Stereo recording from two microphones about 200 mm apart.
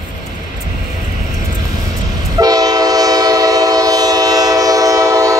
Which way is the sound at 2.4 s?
20° right (ahead or behind).